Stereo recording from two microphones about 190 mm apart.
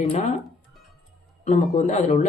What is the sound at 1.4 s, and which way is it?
Speech, 40° left (ahead or behind).